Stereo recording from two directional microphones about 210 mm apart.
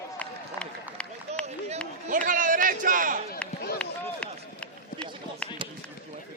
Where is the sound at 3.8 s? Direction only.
5° left (ahead or behind).